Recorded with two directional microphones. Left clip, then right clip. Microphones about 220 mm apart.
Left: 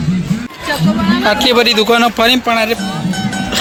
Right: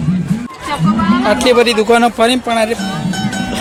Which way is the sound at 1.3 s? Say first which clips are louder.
Even; centre (ahead or behind).